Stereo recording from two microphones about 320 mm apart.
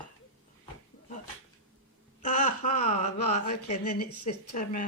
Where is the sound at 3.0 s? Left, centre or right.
Left.